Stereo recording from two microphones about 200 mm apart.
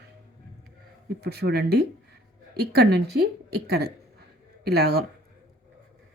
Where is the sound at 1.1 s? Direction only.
55° right (ahead or behind).